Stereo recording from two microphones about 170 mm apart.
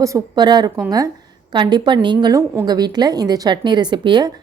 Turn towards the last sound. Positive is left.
turn(degrees=-25)  # may be behind; listen again after turning